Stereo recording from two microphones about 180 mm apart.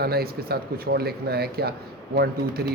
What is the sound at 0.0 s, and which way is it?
Speech, 60° right (ahead or behind).